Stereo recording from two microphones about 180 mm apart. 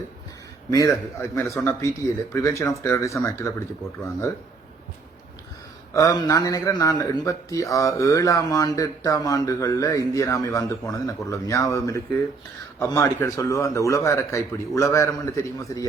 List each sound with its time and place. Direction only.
0.7 s a man's voice: 20° left (ahead or behind)
5.9 s a man's voice: 20° left (ahead or behind)